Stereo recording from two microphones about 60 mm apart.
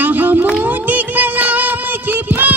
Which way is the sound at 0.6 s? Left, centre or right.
Right.